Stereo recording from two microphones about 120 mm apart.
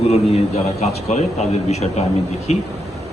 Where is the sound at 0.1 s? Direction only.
65° left (ahead or behind).